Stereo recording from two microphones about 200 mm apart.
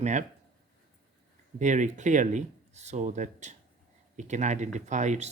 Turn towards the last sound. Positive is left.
turn(degrees=-35)  # may be behind; listen again after turning